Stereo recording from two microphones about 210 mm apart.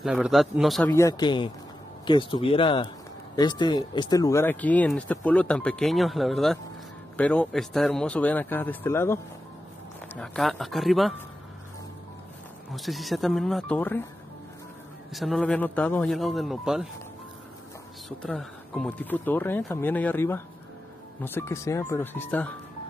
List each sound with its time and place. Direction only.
0.0 s a man's voice: 5° right (ahead or behind)
0.9 s a man's voice: 15° left (ahead or behind); by 11.1 s centre (ahead or behind)
12.7 s a man's voice: centre (ahead or behind)
15.1 s a man's voice: centre (ahead or behind)
18.2 s speech: 5° left (ahead or behind)